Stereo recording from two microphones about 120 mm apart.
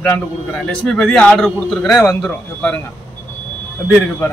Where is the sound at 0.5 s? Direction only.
5° left (ahead or behind).